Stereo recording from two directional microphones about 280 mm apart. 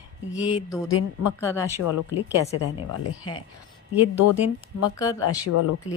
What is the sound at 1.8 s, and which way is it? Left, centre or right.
Speech, left.